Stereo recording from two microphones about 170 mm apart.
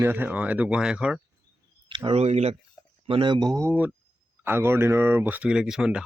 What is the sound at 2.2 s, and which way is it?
Speech, 40° right (ahead or behind).